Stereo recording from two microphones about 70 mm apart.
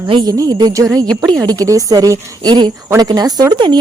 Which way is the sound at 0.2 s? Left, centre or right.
Right.